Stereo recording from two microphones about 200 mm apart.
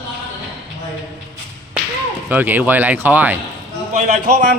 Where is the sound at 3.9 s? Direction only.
35° right (ahead or behind).